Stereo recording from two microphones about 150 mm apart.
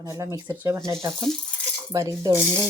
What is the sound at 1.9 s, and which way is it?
Speech, 25° right (ahead or behind).